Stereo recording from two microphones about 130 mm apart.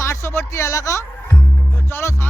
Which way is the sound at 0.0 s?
20° left (ahead or behind).